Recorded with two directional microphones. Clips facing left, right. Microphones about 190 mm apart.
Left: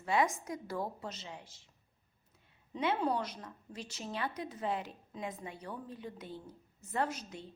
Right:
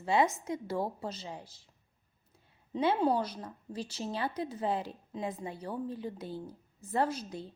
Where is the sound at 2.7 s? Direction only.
30° right (ahead or behind).